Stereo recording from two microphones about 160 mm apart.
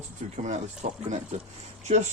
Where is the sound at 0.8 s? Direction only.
50° right (ahead or behind).